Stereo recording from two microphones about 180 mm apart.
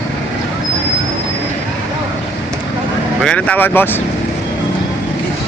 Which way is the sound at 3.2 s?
5° left (ahead or behind).